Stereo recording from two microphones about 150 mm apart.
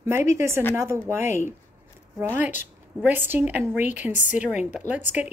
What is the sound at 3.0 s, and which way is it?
A woman's voice, 15° right (ahead or behind).